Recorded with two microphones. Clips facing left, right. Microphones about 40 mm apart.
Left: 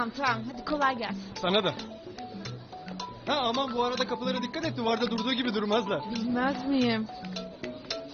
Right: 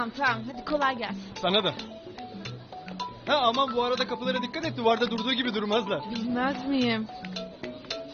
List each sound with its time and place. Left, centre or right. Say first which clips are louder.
0.0 s speech: right 2 dB; right
3.0 s speech: right 5 dB; right
6.7 s music: even; right